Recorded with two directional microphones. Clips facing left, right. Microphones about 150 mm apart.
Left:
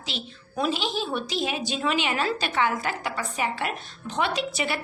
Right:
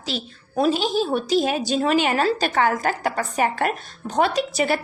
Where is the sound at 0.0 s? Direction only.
35° right (ahead or behind).